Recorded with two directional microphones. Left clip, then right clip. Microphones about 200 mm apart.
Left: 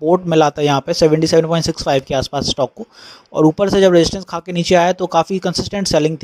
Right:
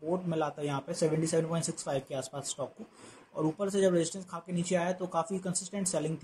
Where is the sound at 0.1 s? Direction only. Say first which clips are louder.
Left 19 dB; 40° left (ahead or behind).